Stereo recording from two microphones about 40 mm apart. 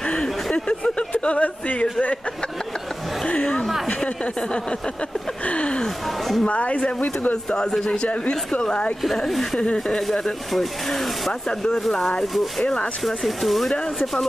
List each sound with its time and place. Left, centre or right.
0.0 s a sound: left
1.2 s speech: left
4.0 s speech: left
6.0 s speech: centre
6.4 s speech: left
6.8 s speech: left
7.4 s speech: centre
9.1 s speech: centre
13.0 s speech: centre